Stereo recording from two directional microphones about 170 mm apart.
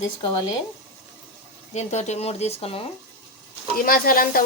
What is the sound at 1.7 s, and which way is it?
A woman's voice, 40° left (ahead or behind).